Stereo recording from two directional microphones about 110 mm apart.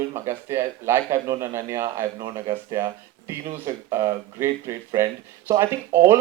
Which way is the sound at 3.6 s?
30° right (ahead or behind).